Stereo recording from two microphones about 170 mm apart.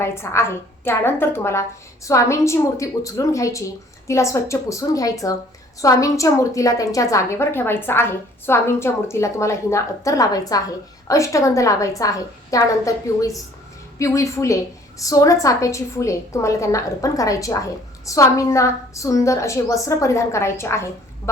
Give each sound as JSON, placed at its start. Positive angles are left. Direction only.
{"t": 0.0, "sound": "a woman's voice", "side_deg": 15}